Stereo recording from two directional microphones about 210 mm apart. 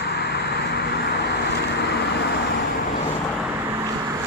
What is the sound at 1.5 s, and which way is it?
Vehicle, 55° left (ahead or behind).